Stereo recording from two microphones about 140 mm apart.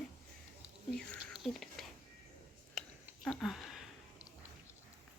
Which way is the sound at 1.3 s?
Centre (ahead or behind).